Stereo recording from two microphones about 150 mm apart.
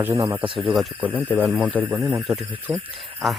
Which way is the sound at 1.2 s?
10° left (ahead or behind).